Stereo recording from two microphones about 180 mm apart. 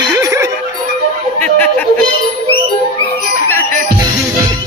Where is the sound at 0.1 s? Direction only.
20° right (ahead or behind).